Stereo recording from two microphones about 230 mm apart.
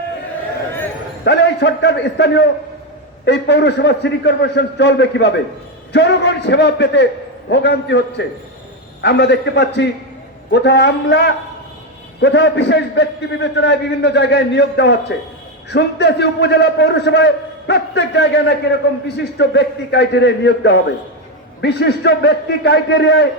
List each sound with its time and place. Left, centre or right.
1.2 s a man's voice: left